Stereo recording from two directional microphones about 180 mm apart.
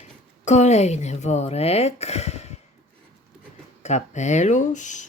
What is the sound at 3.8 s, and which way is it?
Speech, 40° left (ahead or behind).